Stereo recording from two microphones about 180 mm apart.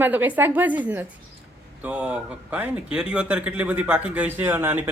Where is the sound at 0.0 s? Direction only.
10° right (ahead or behind).